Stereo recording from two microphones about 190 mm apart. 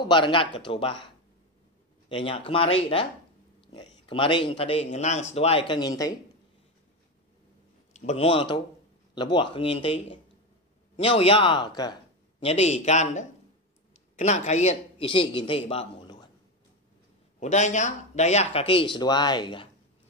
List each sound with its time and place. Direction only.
0.0 s a man's voice: 25° left (ahead or behind)
2.0 s a man's voice: 30° left (ahead or behind)
7.9 s a man's voice: 35° left (ahead or behind)
16.0 s a sound: 25° left (ahead or behind)
17.4 s a man's voice: 35° left (ahead or behind)